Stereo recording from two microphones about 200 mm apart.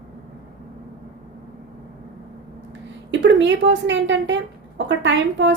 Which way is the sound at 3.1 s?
65° right (ahead or behind).